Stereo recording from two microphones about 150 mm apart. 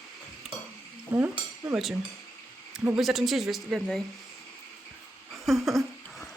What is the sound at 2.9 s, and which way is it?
Speech, centre (ahead or behind).